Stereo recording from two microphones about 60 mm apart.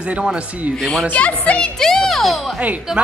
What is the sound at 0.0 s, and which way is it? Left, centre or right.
Speech, centre.